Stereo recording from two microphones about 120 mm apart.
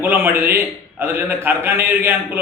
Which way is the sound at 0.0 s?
20° right (ahead or behind).